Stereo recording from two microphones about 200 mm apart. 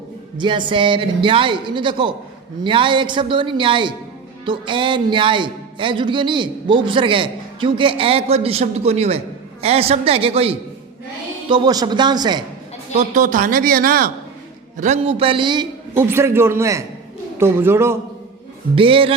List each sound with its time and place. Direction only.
0.3 s speech: 25° right (ahead or behind)
12.9 s a man's voice: 35° right (ahead or behind)
14.8 s speech: 30° right (ahead or behind)
16.0 s a man's voice: 10° right (ahead or behind)
18.7 s speech: 25° right (ahead or behind)